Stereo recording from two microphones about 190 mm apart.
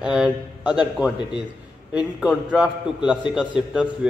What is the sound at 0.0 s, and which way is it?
A man's voice, 5° right (ahead or behind).